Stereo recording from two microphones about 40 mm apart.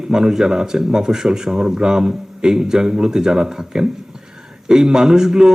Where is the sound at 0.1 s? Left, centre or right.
Centre.